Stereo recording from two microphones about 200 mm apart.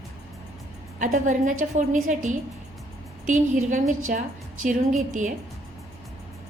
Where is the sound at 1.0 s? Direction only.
40° right (ahead or behind).